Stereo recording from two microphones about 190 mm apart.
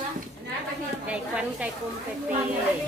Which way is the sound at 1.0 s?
5° right (ahead or behind).